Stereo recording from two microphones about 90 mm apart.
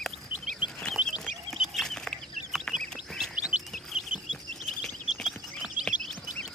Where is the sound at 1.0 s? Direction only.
15° right (ahead or behind).